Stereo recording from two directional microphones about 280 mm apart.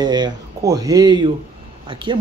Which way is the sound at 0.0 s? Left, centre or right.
Centre.